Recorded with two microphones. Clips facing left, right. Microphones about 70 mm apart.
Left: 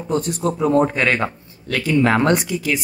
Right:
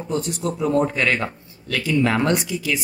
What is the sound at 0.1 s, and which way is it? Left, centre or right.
Speech, left.